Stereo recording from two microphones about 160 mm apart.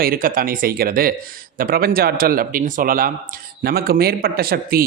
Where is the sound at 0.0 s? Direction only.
65° right (ahead or behind).